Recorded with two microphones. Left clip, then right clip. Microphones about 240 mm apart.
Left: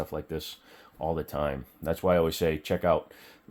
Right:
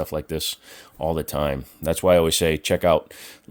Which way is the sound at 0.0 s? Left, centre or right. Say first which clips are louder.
Right 8 dB; right.